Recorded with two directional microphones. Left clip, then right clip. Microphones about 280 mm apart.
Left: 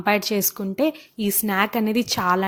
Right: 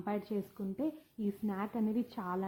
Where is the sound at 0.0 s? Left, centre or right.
Left.